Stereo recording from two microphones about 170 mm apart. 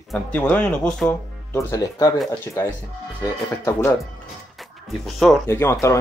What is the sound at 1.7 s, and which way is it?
Speech, 20° left (ahead or behind).